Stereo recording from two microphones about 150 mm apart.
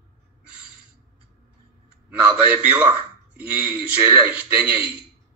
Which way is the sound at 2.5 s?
10° right (ahead or behind).